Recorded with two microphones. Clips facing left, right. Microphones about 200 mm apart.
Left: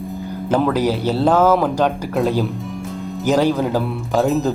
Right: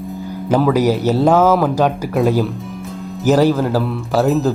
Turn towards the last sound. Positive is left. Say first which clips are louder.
# right 2 dB
turn(degrees=0)  # may be behind; listen again after turning